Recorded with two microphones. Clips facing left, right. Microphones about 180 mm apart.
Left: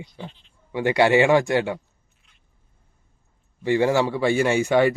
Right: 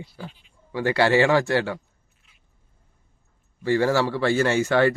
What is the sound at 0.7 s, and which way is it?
A man's voice, 20° left (ahead or behind).